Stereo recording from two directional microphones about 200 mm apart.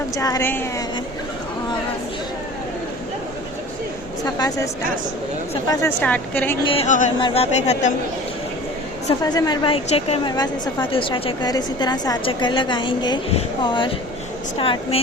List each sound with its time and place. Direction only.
0.2 s speech: 15° left (ahead or behind)
4.4 s speech: 15° left (ahead or behind)
6.7 s a woman's voice: 35° left (ahead or behind)
7.2 s a woman's voice: 25° left (ahead or behind)
9.2 s a woman's voice: 20° left (ahead or behind)